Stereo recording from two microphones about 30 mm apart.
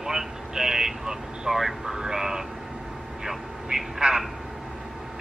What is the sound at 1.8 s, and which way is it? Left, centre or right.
Speech, centre.